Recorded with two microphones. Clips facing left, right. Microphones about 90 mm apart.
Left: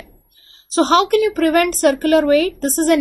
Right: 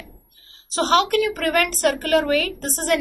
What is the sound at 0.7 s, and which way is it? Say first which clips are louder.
A woman's voice: left 5 dB; 20° left (ahead or behind).